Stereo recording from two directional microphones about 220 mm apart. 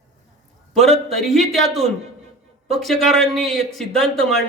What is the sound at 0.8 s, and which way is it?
Speech, 30° right (ahead or behind).